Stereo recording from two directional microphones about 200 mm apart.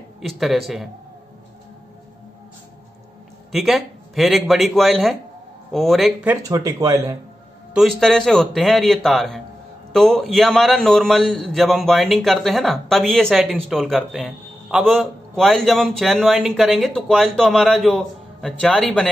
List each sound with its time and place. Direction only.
0.2 s a man's voice: centre (ahead or behind)
3.5 s a man's voice: centre (ahead or behind)
6.3 s speech: 15° right (ahead or behind)
7.7 s a man's voice: centre (ahead or behind)